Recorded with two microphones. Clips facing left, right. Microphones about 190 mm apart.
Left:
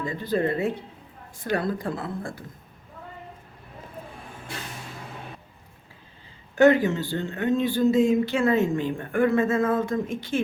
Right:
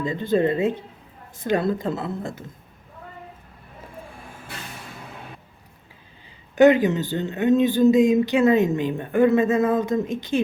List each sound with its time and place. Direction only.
0.0 s speech: 20° right (ahead or behind)
6.6 s speech: 20° right (ahead or behind)